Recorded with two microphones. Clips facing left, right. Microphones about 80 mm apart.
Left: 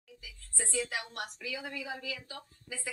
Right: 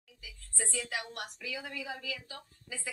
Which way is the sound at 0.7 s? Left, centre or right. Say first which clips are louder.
Left 3 dB; left.